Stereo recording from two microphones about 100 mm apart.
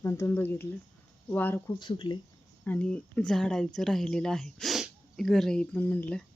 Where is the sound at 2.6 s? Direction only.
15° left (ahead or behind).